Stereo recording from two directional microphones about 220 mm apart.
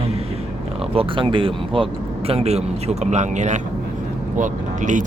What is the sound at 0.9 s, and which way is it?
Speech, 25° right (ahead or behind).